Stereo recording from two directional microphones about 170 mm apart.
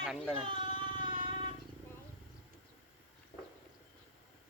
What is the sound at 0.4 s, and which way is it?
Music, 30° right (ahead or behind).